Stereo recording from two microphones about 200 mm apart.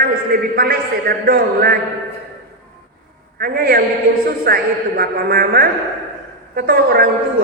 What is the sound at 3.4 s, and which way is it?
A man's voice, 45° right (ahead or behind).